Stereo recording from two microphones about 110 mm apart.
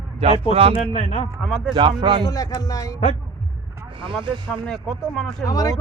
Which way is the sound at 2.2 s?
35° left (ahead or behind).